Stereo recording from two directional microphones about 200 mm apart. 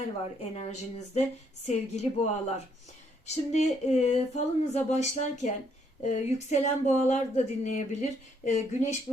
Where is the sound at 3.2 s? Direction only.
35° left (ahead or behind).